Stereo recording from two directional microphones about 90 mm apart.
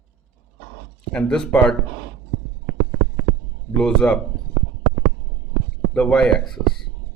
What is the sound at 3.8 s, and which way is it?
Speech, 10° left (ahead or behind).